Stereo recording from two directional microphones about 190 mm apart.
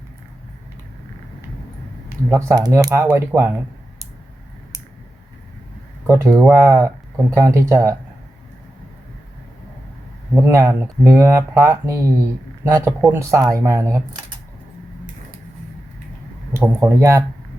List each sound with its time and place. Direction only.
2.3 s speech: 20° right (ahead or behind)
6.1 s speech: 15° right (ahead or behind)
10.4 s speech: 15° right (ahead or behind)
16.6 s speech: 15° right (ahead or behind)